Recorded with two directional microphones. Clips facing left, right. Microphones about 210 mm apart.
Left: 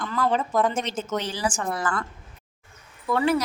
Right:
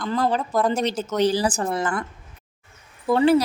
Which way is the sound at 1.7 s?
20° right (ahead or behind).